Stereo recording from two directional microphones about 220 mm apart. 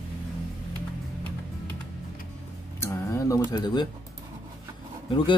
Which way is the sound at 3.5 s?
20° left (ahead or behind).